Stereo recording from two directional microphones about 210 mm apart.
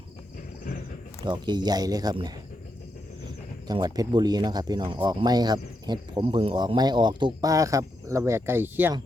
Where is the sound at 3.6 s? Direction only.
20° right (ahead or behind).